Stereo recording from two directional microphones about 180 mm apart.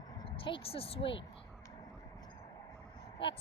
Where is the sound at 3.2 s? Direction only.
30° left (ahead or behind).